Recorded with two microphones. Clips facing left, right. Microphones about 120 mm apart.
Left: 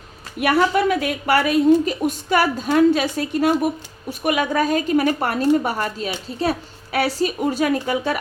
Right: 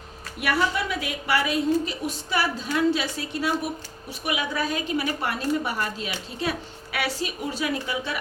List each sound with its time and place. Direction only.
0.3 s a woman's voice: 55° left (ahead or behind)